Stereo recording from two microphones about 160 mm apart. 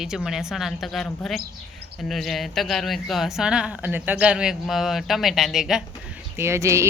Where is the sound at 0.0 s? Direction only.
5° right (ahead or behind).